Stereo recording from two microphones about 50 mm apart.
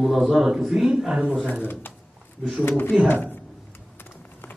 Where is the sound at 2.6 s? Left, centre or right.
Left.